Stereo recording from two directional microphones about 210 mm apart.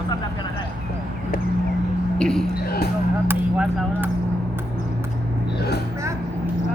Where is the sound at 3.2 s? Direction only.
10° right (ahead or behind).